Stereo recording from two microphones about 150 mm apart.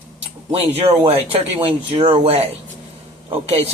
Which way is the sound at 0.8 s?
40° right (ahead or behind).